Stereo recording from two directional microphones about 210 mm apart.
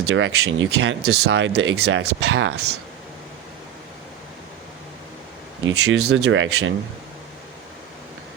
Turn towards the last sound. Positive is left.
turn(degrees=-65)  # may be behind; listen again after turning